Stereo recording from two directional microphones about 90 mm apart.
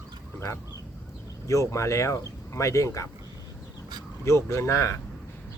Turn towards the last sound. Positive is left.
turn(degrees=35)  # may be behind; listen again after turning